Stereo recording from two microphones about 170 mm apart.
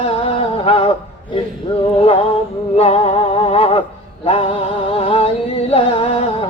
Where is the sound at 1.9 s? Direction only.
35° left (ahead or behind).